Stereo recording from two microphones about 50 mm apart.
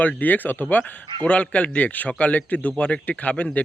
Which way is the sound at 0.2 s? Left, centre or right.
Left.